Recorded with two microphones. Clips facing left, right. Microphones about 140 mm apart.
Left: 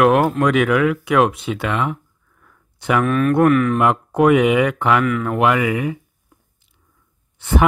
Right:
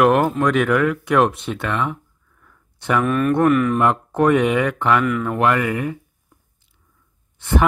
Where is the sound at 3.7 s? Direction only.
10° left (ahead or behind).